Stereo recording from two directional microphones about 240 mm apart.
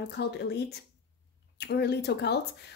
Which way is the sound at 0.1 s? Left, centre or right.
Left.